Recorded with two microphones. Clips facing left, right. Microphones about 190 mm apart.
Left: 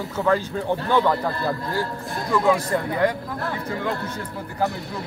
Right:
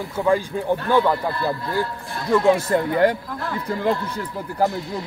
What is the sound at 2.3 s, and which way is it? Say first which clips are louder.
Speech: right 3 dB; 25° right (ahead or behind).